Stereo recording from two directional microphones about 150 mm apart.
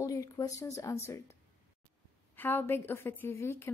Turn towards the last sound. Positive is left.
turn(degrees=15)  # may be behind; listen again after turning